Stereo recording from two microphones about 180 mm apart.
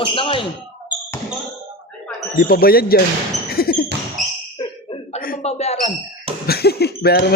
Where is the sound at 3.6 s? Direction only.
55° left (ahead or behind).